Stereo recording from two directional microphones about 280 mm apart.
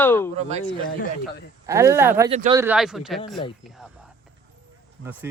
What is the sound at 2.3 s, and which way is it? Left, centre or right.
Speech, right.